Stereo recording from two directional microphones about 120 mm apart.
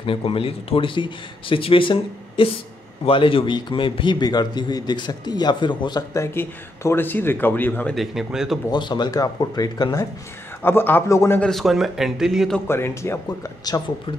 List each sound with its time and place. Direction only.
0.0 s a man's voice: 50° left (ahead or behind)
6.1 s speech: 20° left (ahead or behind)
7.9 s a man's voice: centre (ahead or behind)
8.6 s a man's voice: 40° left (ahead or behind)
10.6 s speech: 20° left (ahead or behind)
11.3 s a man's voice: 5° left (ahead or behind)
12.6 s speech: 20° left (ahead or behind)